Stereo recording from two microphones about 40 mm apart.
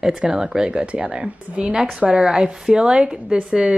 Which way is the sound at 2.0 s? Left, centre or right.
Right.